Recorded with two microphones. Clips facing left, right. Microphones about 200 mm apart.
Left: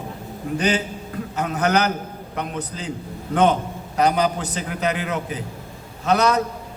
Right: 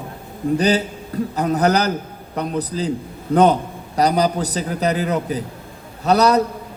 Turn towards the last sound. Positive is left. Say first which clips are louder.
# right 4 dB
turn(degrees=-35)  # may be behind; listen again after turning